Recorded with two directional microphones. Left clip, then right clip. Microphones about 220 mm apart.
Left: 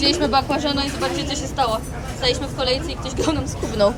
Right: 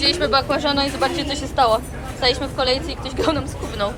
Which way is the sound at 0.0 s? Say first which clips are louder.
Even; 15° left (ahead or behind).